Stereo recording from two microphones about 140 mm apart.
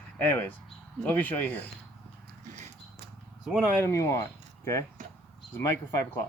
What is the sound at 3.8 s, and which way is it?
Speech, 20° left (ahead or behind).